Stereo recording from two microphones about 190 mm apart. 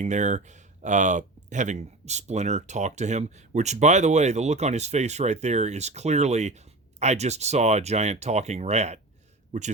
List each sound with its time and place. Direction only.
0.0 s a man's voice: 40° right (ahead or behind)